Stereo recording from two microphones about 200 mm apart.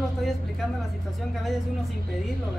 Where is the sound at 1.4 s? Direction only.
Centre (ahead or behind).